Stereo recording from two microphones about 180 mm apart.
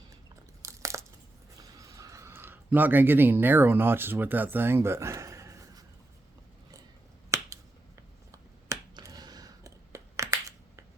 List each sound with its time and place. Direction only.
0.6 s crunch: 15° right (ahead or behind)
2.0 s speech: 15° right (ahead or behind)
7.3 s finger snapping: 15° right (ahead or behind)